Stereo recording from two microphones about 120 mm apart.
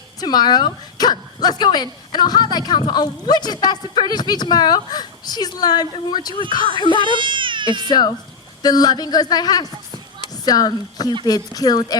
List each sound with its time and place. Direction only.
0.2 s speech: 35° left (ahead or behind)
7.0 s speech: 45° right (ahead or behind)
7.9 s speech: 35° left (ahead or behind)